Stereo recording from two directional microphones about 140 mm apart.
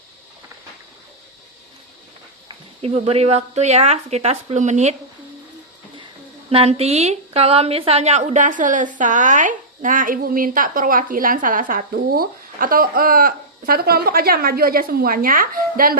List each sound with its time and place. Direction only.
2.5 s speech: 45° right (ahead or behind)
6.5 s a woman's voice: 45° right (ahead or behind); by 16.0 s 90° right